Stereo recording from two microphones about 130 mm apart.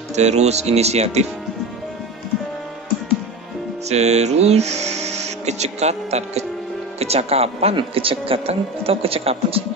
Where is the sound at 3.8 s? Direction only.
55° right (ahead or behind).